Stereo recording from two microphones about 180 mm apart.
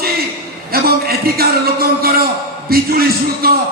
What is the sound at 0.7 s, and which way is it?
Speech, 60° right (ahead or behind).